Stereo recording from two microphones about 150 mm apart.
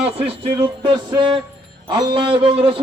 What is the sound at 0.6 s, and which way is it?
Speech, 30° right (ahead or behind).